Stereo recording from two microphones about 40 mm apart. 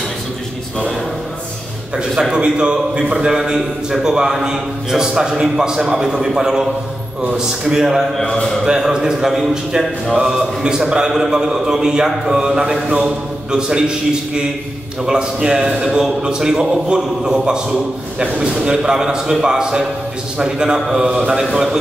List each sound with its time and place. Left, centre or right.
2.0 s a man's voice: centre
18.2 s a man's voice: right
18.6 s a man's voice: centre